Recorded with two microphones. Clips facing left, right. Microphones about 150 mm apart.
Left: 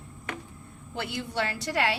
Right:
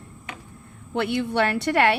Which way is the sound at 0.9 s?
65° right (ahead or behind).